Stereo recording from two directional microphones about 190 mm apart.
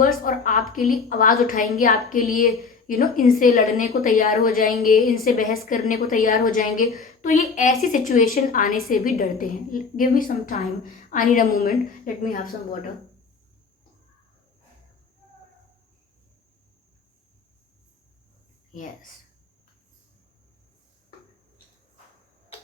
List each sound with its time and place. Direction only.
0.0 s a woman's voice: 45° left (ahead or behind)